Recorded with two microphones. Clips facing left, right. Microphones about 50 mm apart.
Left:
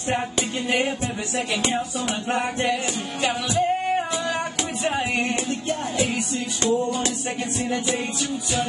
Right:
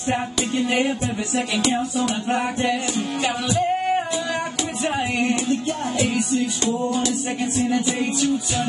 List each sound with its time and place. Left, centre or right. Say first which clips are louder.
0.6 s music: right 3 dB; centre
3.3 s music: left 1 dB; centre
7.8 s music: right 4 dB; centre